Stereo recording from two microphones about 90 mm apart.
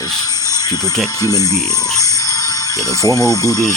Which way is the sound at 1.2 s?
40° left (ahead or behind).